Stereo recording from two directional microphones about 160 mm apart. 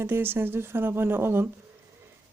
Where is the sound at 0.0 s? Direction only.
15° right (ahead or behind).